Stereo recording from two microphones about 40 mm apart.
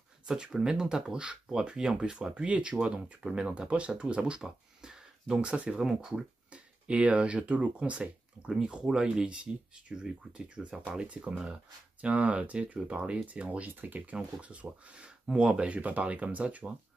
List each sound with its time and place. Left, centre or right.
0.3 s speech: centre
4.4 s speech: centre
6.5 s speech: right
8.8 s speech: centre; by 14.1 s right
14.1 s speech: right